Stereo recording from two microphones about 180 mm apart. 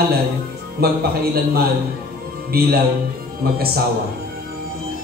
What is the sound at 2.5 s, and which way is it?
A man's voice, 60° right (ahead or behind).